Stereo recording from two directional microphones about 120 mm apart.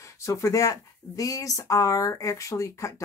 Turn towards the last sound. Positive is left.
turn(degrees=25)  # may be behind; listen again after turning